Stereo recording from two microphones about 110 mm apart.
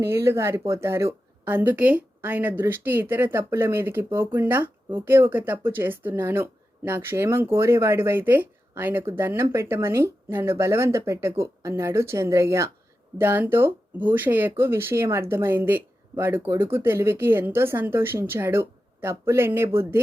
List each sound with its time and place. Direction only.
0.0 s speech: 25° right (ahead or behind)